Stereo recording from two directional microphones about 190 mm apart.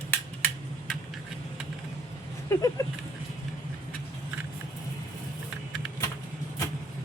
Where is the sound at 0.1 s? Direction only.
5° left (ahead or behind).